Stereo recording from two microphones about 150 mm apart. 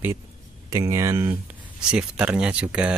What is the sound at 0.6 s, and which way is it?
Speech, 20° right (ahead or behind).